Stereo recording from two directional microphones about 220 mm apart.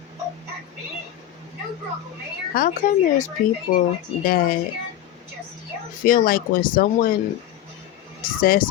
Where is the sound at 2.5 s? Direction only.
40° left (ahead or behind).